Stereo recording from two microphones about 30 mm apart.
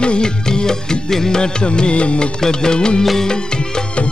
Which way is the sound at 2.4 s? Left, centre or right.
Left.